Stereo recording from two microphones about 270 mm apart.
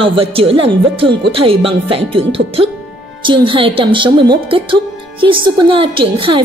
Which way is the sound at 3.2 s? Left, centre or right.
Centre.